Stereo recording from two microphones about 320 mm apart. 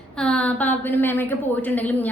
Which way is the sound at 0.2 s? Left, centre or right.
Centre.